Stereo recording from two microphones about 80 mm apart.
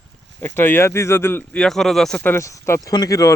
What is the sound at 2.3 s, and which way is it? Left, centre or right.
Speech, left.